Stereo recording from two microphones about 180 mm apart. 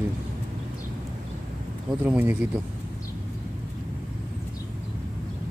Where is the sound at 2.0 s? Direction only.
10° right (ahead or behind).